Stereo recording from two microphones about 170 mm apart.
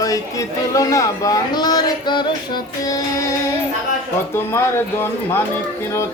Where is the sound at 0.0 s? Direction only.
20° left (ahead or behind).